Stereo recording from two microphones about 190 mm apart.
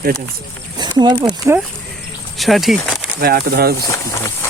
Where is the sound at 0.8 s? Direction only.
20° right (ahead or behind).